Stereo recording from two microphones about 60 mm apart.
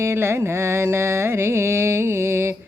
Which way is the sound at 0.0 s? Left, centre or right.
Right.